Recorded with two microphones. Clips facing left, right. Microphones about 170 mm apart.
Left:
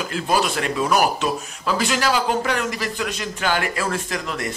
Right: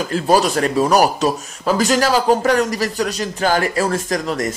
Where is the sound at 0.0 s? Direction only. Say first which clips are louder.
Right 6 dB; 40° right (ahead or behind).